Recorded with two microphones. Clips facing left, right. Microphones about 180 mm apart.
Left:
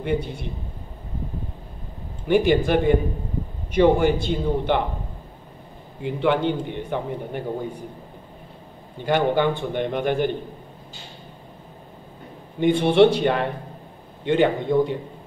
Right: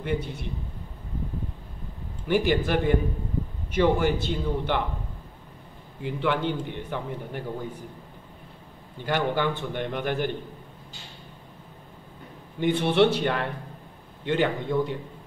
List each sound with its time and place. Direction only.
2.2 s a man's voice: 20° left (ahead or behind)
6.0 s a man's voice: 20° left (ahead or behind)
9.0 s a man's voice: 20° left (ahead or behind)
12.5 s a man's voice: 20° left (ahead or behind)